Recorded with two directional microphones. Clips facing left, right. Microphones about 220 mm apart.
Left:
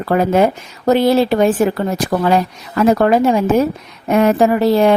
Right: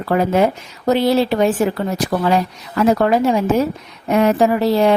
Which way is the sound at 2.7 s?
50° left (ahead or behind).